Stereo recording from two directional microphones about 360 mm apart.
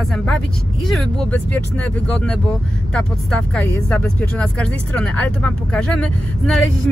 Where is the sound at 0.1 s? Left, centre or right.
Centre.